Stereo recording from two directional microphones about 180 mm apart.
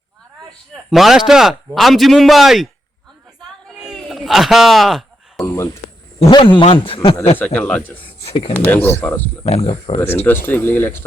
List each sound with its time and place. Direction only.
0.9 s a man's voice: centre (ahead or behind)
3.8 s a sound: 5° right (ahead or behind)
6.1 s a man's voice: 30° left (ahead or behind)
7.3 s speech: 5° left (ahead or behind)
8.0 s a sound: 30° left (ahead or behind)
8.5 s speech: 10° left (ahead or behind)
9.6 s speech: 35° left (ahead or behind)
10.2 s speech: 10° left (ahead or behind)